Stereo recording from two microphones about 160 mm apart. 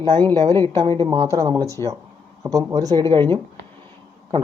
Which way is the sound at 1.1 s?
25° right (ahead or behind).